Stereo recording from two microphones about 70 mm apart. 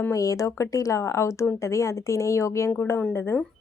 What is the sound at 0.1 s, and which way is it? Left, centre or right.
Speech, left.